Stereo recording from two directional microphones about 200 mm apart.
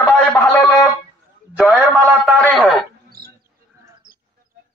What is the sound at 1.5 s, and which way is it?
A man's voice, 5° right (ahead or behind).